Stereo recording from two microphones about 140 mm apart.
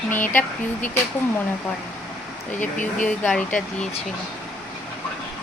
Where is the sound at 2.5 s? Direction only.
65° left (ahead or behind).